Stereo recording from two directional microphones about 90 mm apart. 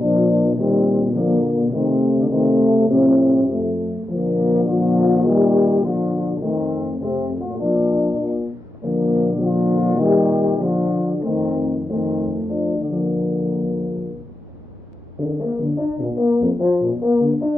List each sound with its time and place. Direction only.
0.1 s brass instrument: 30° right (ahead or behind)
7.6 s brass instrument: 30° right (ahead or behind)
16.2 s brass instrument: 25° right (ahead or behind)